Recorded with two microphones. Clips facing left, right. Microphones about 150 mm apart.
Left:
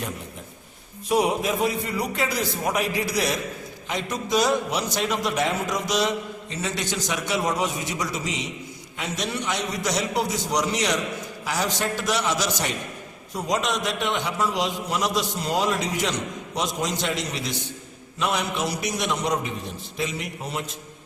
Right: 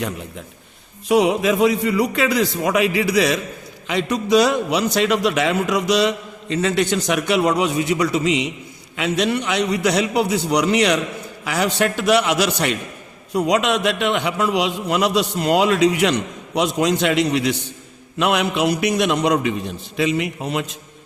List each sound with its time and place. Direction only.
1.0 s a man's voice: 90° right
3.8 s a man's voice: 75° right (ahead or behind)